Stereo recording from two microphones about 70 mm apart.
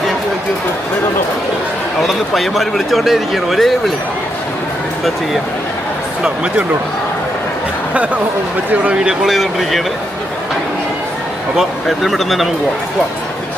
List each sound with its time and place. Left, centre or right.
2.0 s a man's voice: centre
6.2 s speech: centre
8.7 s speech: centre
9.2 s a man's voice: centre
11.5 s a man's voice: centre